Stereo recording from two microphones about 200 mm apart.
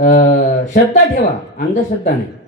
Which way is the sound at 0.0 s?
40° left (ahead or behind).